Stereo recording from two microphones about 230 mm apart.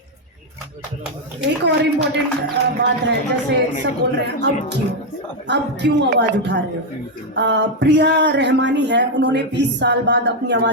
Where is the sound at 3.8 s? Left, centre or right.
Right.